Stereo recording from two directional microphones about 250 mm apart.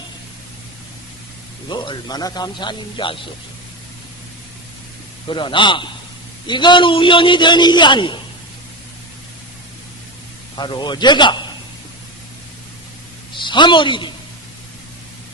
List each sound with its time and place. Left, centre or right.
1.7 s a man's voice: centre
5.3 s a man's voice: centre
10.6 s a man's voice: centre
13.4 s a man's voice: centre